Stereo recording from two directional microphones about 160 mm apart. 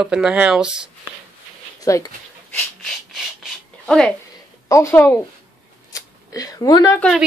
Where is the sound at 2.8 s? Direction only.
Centre (ahead or behind).